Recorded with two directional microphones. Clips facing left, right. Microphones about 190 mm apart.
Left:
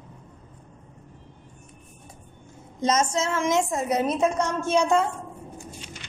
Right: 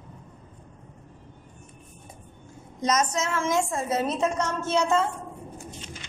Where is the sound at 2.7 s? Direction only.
25° left (ahead or behind).